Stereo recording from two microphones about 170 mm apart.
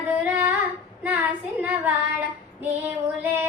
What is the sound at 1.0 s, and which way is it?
Child singing, 10° right (ahead or behind).